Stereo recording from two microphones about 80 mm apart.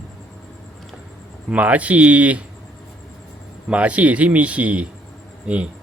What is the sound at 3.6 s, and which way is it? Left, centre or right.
A man's voice, centre.